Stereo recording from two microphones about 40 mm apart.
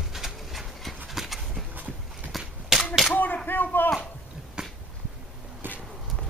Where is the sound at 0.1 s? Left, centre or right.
Centre.